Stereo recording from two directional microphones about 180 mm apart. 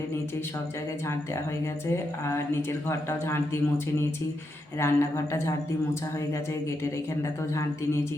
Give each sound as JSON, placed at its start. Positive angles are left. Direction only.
{"t": 2.6, "sound": "a woman's voice", "side_deg": 15}
{"t": 4.8, "sound": "a woman's voice", "side_deg": 15}